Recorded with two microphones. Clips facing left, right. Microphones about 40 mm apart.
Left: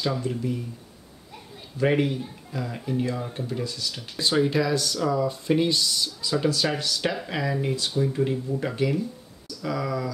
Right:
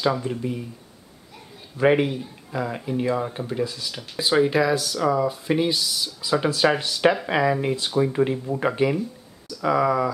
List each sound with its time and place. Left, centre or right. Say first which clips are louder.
0.0 s speech: right 3 dB; centre
1.8 s speech: right 4 dB; centre